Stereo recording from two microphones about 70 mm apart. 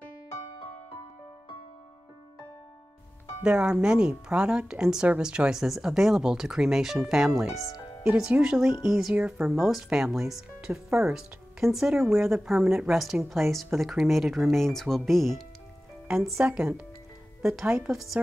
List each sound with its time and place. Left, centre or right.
3.4 s speech: centre
8.1 s speech: centre
9.1 s speech: centre
9.5 s speech: centre
16.4 s speech: centre